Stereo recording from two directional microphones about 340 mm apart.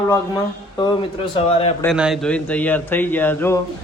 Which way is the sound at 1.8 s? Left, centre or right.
Centre.